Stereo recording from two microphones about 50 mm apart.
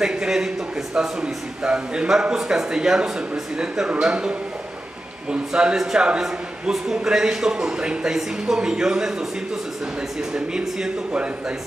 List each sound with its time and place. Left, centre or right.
0.0 s a man's voice: centre
5.8 s a man's voice: centre
10.3 s a man's voice: centre